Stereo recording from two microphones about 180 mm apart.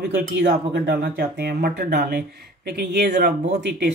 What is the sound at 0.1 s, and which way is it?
Speech, 70° right (ahead or behind).